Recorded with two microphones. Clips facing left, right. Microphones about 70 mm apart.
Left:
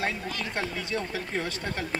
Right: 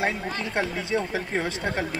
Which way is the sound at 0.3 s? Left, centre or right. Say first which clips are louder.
Right 4 dB; right.